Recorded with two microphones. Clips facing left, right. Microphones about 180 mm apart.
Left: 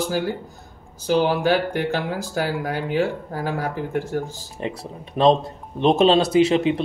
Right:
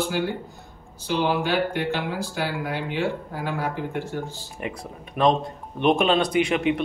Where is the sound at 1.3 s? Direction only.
40° left (ahead or behind).